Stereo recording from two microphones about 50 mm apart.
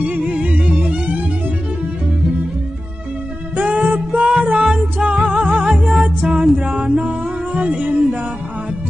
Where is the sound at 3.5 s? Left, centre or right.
Right.